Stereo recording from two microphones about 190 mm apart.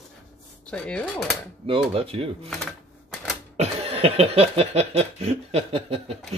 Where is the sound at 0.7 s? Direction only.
5° left (ahead or behind).